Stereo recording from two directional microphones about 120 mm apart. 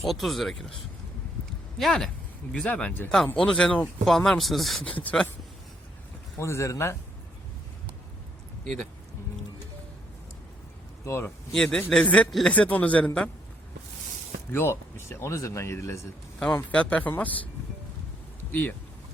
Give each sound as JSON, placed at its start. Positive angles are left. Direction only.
{"t": 0.0, "sound": "speech", "side_deg": 0}
{"t": 1.8, "sound": "a man's voice", "side_deg": 5}
{"t": 4.9, "sound": "a man's voice", "side_deg": 10}
{"t": 6.4, "sound": "speech", "side_deg": 25}
{"t": 11.0, "sound": "speech", "side_deg": 20}
{"t": 11.5, "sound": "a man's voice", "side_deg": 5}
{"t": 14.5, "sound": "speech", "side_deg": 20}
{"t": 16.7, "sound": "a man's voice", "side_deg": 10}